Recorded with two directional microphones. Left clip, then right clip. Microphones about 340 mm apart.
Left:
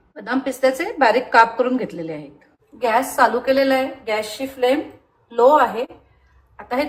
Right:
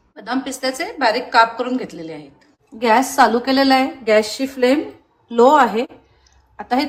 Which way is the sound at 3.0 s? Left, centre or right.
Centre.